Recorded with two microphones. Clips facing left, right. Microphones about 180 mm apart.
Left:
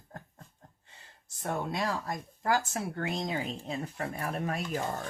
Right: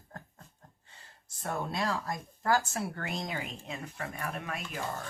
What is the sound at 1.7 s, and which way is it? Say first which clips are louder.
Speech: even; 20° left (ahead or behind).